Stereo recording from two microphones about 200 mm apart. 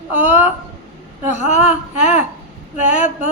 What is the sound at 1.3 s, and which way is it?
Speech, 35° left (ahead or behind).